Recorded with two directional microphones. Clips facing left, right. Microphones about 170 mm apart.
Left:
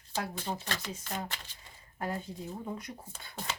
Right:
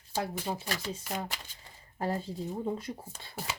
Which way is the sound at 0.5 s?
10° right (ahead or behind).